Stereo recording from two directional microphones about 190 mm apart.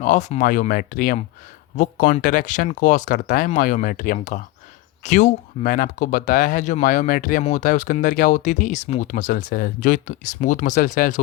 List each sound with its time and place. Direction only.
0.0 s speech: 40° left (ahead or behind)